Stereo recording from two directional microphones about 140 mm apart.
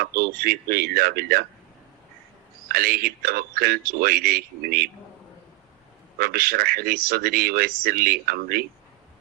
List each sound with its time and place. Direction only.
0.0 s speech: 90° right
2.6 s speech: 90° right
6.1 s speech: 90° right